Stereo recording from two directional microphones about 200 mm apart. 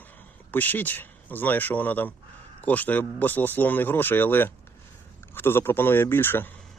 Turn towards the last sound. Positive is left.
turn(degrees=10)  # may be behind; listen again after turning